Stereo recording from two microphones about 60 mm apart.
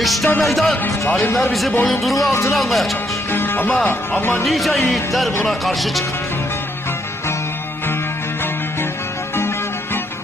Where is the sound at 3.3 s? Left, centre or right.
Left.